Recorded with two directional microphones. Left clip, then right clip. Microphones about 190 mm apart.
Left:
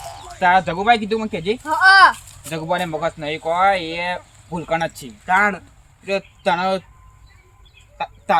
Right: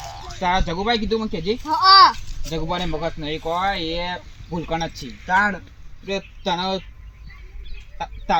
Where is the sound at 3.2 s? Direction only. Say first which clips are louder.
Left 7 dB; 20° left (ahead or behind).